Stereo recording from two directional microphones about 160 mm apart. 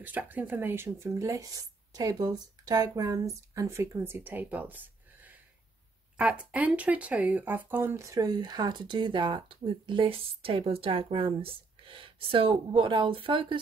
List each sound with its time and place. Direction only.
0.0 s speech: 10° right (ahead or behind); by 13.6 s 35° right (ahead or behind)